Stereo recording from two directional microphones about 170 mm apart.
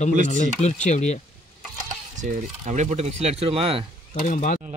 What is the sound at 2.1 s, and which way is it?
Speech, 45° right (ahead or behind).